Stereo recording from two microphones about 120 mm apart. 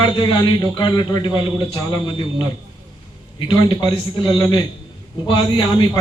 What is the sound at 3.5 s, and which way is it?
A man's voice, 40° left (ahead or behind).